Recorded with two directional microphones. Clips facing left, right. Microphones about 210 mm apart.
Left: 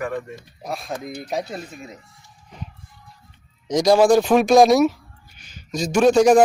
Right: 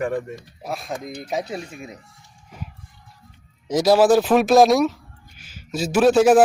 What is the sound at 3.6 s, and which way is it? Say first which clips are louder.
Speech: even; 5° right (ahead or behind).